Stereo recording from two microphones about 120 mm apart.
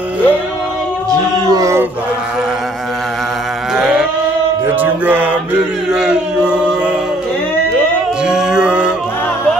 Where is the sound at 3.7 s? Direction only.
5° right (ahead or behind).